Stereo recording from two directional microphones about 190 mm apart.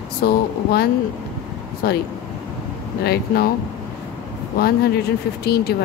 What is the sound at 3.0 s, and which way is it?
Speech, 55° left (ahead or behind).